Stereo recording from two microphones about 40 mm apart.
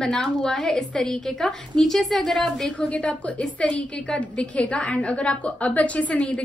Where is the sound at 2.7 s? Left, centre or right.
Left.